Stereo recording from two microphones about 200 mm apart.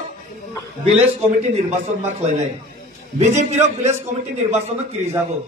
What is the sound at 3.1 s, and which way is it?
Speech, 35° right (ahead or behind).